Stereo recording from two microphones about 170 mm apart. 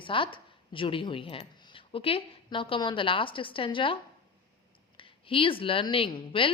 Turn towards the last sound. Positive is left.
turn(degrees=30)  # may be behind; listen again after turning